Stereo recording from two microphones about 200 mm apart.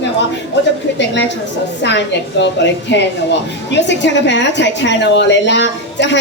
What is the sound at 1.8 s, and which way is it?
Speech, 60° left (ahead or behind).